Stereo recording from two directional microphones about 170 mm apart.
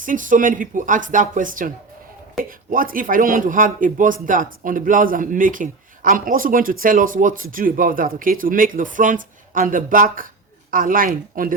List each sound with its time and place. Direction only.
0.0 s speech: 50° right (ahead or behind)